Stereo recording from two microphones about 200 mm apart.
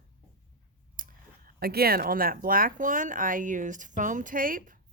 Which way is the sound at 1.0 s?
45° right (ahead or behind).